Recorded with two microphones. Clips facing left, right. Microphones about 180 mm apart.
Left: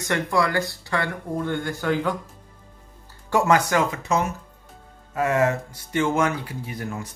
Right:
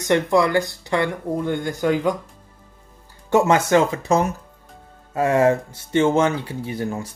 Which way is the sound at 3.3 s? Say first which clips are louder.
Right 3 dB; 25° right (ahead or behind).